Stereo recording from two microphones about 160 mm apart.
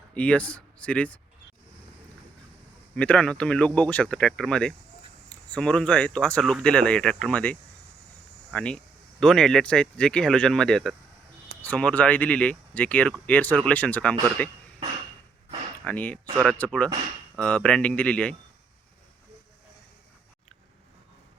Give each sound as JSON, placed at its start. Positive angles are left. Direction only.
{"t": 0.1, "sound": "speech", "side_deg": 10}
{"t": 2.9, "sound": "speech", "side_deg": 10}
{"t": 15.8, "sound": "speech", "side_deg": 10}